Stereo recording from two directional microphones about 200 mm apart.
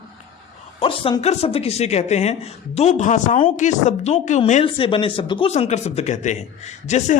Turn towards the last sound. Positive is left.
turn(degrees=35)  # may be behind; listen again after turning